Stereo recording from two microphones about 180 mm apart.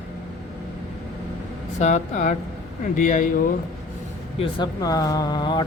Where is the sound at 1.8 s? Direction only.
40° left (ahead or behind).